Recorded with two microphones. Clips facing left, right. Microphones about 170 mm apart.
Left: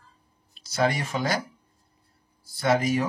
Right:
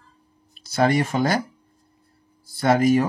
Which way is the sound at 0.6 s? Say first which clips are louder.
Right 5 dB; 55° right (ahead or behind).